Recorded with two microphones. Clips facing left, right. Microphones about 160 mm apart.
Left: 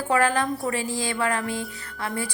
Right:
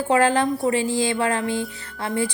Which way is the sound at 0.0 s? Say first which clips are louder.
Right 4 dB; 25° right (ahead or behind).